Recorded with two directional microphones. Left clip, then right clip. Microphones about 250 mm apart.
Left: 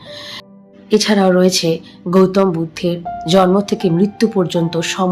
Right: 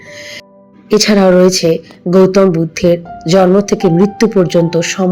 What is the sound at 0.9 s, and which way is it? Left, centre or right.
Speech, centre.